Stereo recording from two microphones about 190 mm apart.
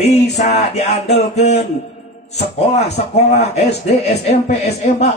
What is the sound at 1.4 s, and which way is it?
Speech, 60° left (ahead or behind).